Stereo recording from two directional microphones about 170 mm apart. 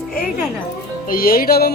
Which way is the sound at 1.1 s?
60° left (ahead or behind).